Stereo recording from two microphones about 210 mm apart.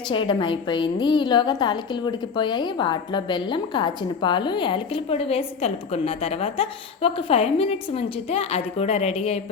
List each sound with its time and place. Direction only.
0.1 s a woman's voice: 25° left (ahead or behind)